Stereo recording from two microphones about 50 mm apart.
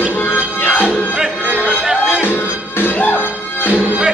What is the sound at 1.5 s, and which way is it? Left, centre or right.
Music, right.